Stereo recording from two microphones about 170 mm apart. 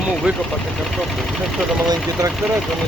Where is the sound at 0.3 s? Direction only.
10° right (ahead or behind).